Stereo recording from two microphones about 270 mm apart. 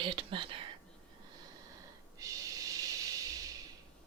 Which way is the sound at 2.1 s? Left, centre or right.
Centre.